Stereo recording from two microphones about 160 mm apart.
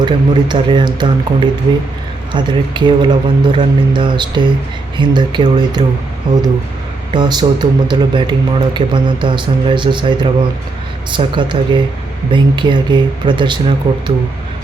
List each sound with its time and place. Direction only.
0.0 s speech: 30° right (ahead or behind)